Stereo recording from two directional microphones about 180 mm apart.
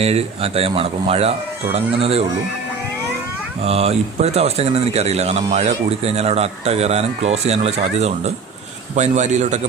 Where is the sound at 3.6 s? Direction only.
35° right (ahead or behind).